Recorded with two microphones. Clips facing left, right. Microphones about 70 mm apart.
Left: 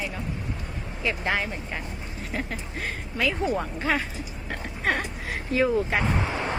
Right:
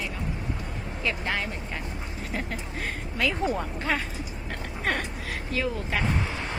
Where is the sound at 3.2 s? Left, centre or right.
Centre.